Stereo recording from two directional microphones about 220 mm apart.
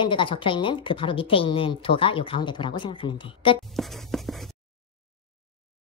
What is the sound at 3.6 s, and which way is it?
Writing, centre (ahead or behind).